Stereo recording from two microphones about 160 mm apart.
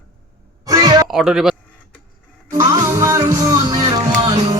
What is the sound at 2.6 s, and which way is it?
Music, 20° right (ahead or behind).